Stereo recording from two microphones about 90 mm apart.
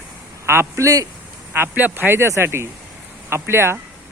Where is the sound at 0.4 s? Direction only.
30° right (ahead or behind).